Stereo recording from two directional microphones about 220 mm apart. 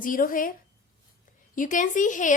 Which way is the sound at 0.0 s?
40° left (ahead or behind).